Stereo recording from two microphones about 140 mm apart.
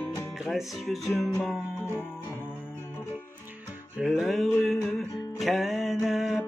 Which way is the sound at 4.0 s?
5° right (ahead or behind).